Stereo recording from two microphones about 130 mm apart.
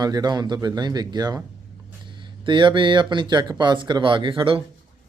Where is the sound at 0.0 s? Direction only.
30° right (ahead or behind).